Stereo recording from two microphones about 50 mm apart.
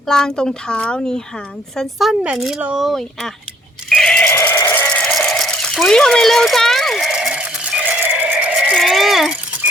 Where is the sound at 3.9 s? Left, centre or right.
Centre.